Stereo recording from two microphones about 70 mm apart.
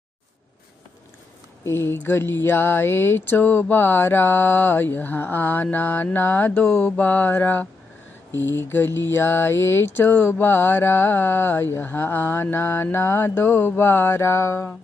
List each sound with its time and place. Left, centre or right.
1.6 s speech: left
6.1 s mantra: left
8.5 s speech: left